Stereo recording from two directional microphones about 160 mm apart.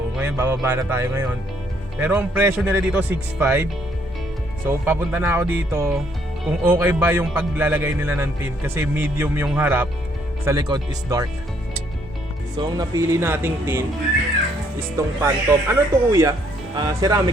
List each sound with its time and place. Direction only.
0.2 s speech: 15° right (ahead or behind)
10.4 s speech: 25° right (ahead or behind)
12.5 s speech: 25° right (ahead or behind)
14.9 s speech: 20° right (ahead or behind)